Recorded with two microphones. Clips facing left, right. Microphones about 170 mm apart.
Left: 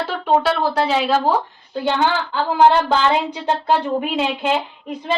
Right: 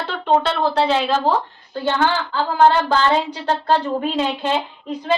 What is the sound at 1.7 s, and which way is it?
Speech, 15° left (ahead or behind).